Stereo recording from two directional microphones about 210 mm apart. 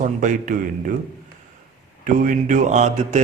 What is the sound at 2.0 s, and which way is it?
Speech, 40° right (ahead or behind).